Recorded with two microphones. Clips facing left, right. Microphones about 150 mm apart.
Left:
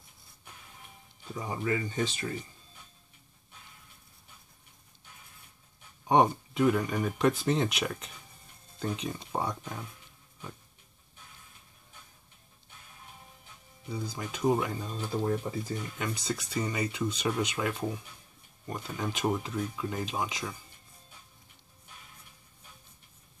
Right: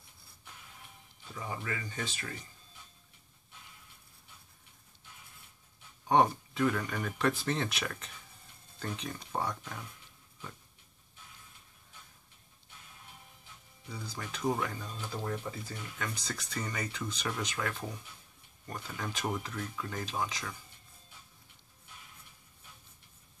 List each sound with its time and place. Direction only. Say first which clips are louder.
1.3 s speech: left 7 dB; 20° left (ahead or behind)
6.0 s speech: left 2 dB; 15° left (ahead or behind)
13.8 s speech: left 6 dB; 15° left (ahead or behind)
14.8 s speech: left 7 dB; 25° left (ahead or behind)
16.0 s speech: left 3 dB; 15° left (ahead or behind)